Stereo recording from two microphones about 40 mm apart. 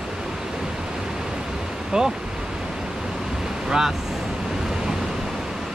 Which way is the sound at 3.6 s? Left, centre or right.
Centre.